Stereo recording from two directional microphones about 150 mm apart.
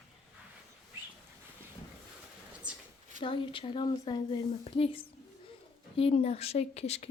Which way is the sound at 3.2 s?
35° left (ahead or behind).